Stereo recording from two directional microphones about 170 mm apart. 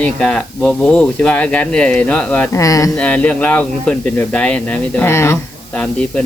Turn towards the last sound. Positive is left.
turn(degrees=5)  # may be behind; listen again after turning